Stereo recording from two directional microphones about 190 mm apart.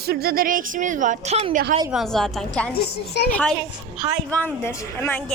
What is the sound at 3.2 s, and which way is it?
Speech, 60° left (ahead or behind).